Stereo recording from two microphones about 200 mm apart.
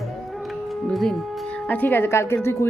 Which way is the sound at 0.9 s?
Centre (ahead or behind).